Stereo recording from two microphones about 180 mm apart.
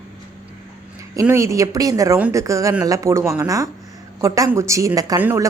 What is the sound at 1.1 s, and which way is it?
A woman's voice, 15° right (ahead or behind).